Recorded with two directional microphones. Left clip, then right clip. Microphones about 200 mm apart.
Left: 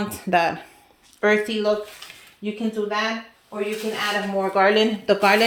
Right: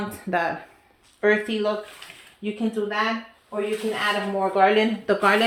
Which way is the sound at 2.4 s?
35° left (ahead or behind).